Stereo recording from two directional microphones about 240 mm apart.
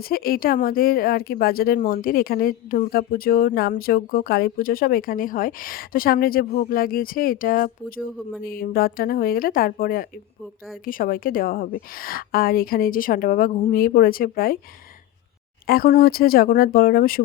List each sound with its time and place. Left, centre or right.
0.0 s speech: left
15.6 s speech: left